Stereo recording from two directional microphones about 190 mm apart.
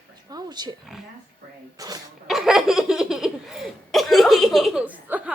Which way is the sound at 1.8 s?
20° right (ahead or behind).